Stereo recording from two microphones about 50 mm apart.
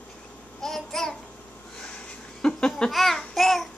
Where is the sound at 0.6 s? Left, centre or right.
Centre.